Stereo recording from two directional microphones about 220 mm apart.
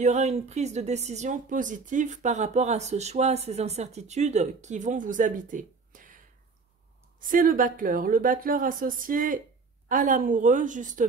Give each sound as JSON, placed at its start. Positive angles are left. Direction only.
{"t": 0.0, "sound": "speech", "side_deg": -30}